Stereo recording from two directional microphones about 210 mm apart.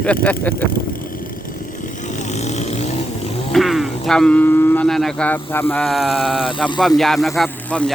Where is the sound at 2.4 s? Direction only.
30° left (ahead or behind).